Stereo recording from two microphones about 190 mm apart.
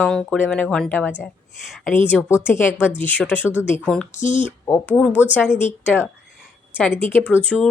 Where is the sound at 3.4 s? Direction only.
10° right (ahead or behind).